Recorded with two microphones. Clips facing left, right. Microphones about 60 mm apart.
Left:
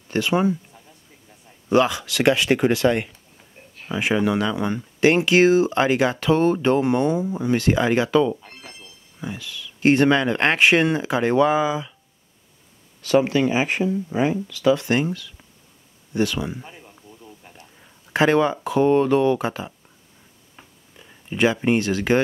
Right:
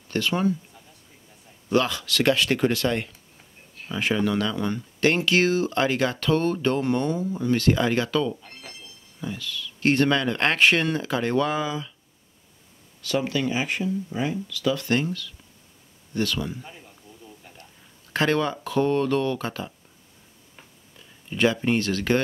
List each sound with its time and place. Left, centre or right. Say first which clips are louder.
0.1 s speech: left 4 dB; centre
1.7 s speech: left 4 dB; centre
8.5 s music: left 1 dB; left
9.2 s speech: even; centre
13.0 s speech: left 7 dB; left
18.1 s speech: left 5 dB; centre
20.5 s a sound: left 3 dB; centre